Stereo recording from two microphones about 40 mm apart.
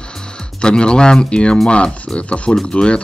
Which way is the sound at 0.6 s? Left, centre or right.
Left.